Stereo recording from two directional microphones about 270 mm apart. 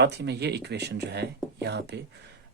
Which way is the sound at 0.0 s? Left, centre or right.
Right.